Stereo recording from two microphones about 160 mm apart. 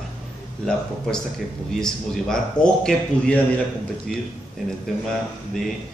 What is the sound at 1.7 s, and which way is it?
A man's voice, 5° left (ahead or behind).